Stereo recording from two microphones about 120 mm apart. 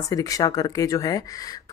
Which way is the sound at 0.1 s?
30° left (ahead or behind).